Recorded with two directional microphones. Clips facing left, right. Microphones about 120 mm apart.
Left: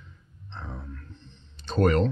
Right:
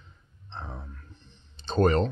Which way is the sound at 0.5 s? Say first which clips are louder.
Left 1 dB; 20° right (ahead or behind).